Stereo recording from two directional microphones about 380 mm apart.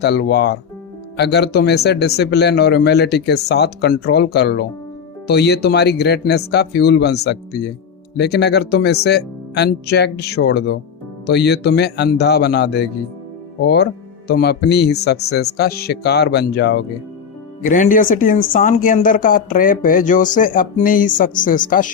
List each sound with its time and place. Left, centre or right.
0.0 s speech: left
14.3 s speech: left